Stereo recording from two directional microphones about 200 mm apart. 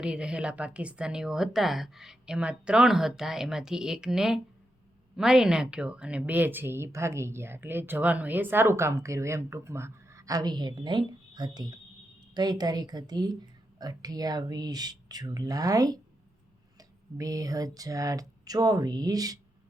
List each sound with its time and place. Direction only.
0.0 s speech: 5° right (ahead or behind)